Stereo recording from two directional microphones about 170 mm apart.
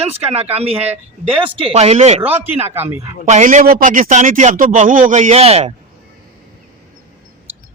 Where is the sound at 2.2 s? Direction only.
10° right (ahead or behind).